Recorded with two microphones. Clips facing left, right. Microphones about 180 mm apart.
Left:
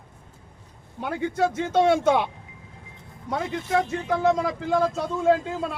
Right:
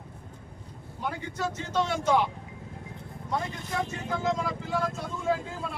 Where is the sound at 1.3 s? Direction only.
55° left (ahead or behind).